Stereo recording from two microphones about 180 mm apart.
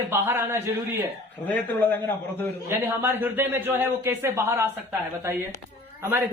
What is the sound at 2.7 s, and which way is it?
A man's voice, 10° right (ahead or behind).